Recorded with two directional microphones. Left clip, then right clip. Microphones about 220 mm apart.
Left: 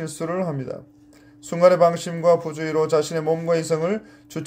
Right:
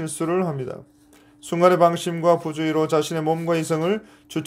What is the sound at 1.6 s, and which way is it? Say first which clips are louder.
Speech: left 1 dB; 50° right (ahead or behind).